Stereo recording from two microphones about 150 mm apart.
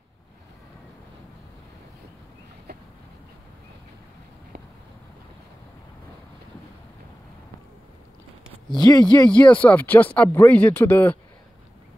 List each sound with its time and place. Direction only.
8.7 s speech: 25° left (ahead or behind)
9.3 s speech: 10° left (ahead or behind)